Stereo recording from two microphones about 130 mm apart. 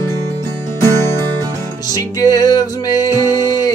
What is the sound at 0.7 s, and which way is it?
Music, 20° left (ahead or behind).